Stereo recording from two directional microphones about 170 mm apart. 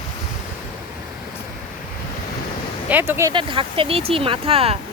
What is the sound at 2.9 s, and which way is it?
Speech, 10° right (ahead or behind).